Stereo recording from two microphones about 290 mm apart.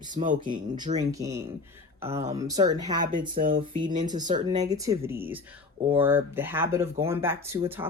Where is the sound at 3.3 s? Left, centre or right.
Right.